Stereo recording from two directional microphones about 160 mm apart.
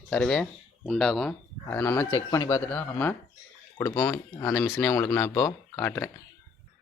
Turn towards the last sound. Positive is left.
turn(degrees=5)  # may be behind; listen again after turning